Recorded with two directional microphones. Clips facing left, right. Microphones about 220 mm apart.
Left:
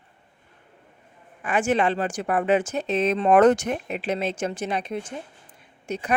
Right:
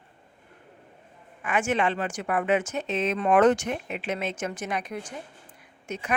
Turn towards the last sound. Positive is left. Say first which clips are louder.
# left 4 dB
turn(degrees=35)  # may be behind; listen again after turning